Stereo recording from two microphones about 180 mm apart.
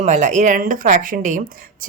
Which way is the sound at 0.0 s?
40° right (ahead or behind).